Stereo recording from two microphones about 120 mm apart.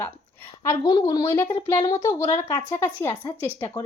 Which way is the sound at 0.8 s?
35° left (ahead or behind).